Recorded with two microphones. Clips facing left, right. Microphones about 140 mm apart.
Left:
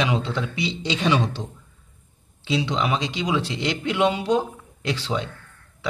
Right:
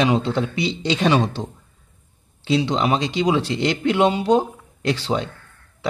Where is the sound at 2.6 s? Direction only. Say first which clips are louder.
Right 4 dB; 40° right (ahead or behind).